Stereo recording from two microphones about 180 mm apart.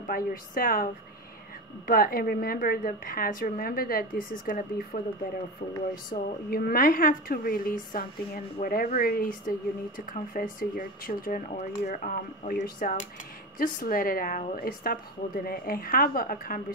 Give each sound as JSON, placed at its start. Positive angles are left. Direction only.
{"t": 0.0, "sound": "a woman's voice", "side_deg": 50}
{"t": 1.9, "sound": "a woman's voice", "side_deg": 55}
{"t": 6.1, "sound": "a woman's voice", "side_deg": 55}